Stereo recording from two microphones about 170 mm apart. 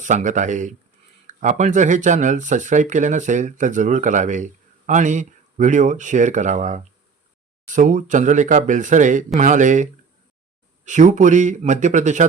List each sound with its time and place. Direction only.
0.0 s speech: 45° right (ahead or behind)